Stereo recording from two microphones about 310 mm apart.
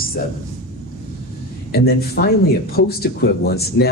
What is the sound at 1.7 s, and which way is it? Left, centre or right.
Speech, left.